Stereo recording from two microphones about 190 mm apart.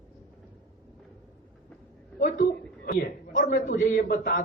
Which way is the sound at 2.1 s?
50° left (ahead or behind).